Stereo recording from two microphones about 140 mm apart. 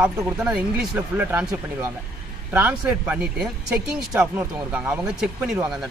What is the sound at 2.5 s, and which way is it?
Speech, 10° right (ahead or behind).